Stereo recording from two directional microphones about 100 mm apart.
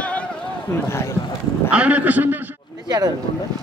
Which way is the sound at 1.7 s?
15° right (ahead or behind).